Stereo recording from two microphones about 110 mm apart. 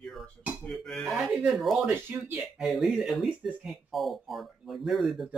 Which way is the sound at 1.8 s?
20° right (ahead or behind).